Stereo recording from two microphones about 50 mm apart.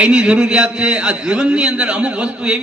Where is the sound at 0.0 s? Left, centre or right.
Centre.